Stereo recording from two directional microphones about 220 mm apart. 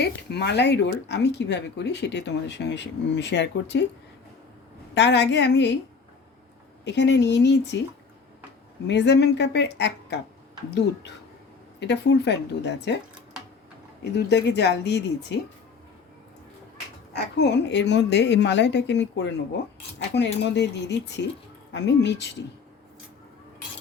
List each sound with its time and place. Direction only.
0.0 s speech: 50° left (ahead or behind)
4.9 s speech: 50° left (ahead or behind)
6.8 s speech: 50° left (ahead or behind)
8.9 s speech: 50° left (ahead or behind)
11.8 s speech: 50° left (ahead or behind)
14.0 s speech: 50° left (ahead or behind)
17.2 s speech: 50° left (ahead or behind)